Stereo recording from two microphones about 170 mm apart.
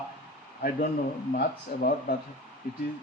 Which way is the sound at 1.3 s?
60° left (ahead or behind).